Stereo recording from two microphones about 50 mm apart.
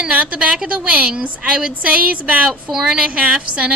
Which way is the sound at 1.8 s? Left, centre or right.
Right.